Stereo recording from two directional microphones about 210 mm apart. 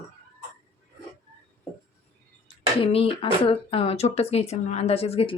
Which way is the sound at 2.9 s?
25° left (ahead or behind).